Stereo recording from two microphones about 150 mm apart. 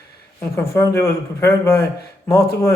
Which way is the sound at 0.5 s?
20° left (ahead or behind).